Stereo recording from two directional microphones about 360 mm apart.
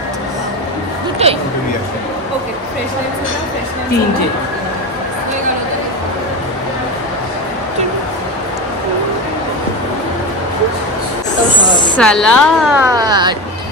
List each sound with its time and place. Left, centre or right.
1.2 s a woman's voice: centre
12.0 s a woman's voice: centre